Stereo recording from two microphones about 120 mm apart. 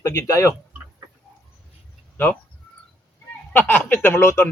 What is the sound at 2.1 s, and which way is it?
Speech, 15° left (ahead or behind).